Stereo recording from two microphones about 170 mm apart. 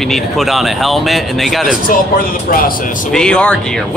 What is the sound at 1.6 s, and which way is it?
Speech, 55° left (ahead or behind).